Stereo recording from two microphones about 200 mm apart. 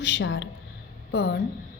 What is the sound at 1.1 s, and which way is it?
Speech, 55° left (ahead or behind).